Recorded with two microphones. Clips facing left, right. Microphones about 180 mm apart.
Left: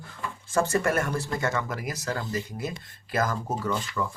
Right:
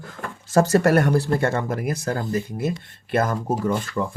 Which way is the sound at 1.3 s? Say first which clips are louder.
Right 6 dB; 55° right (ahead or behind).